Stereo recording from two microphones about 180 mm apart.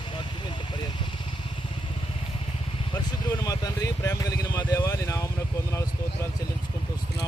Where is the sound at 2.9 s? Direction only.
20° left (ahead or behind).